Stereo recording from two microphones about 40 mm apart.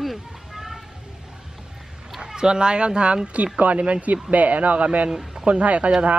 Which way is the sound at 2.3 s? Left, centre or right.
Centre.